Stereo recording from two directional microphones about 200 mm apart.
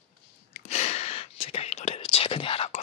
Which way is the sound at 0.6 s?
30° left (ahead or behind).